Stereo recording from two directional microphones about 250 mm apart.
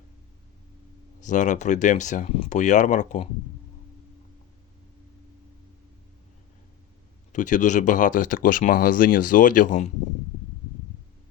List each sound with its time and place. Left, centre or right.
1.2 s speech: left
7.3 s speech: left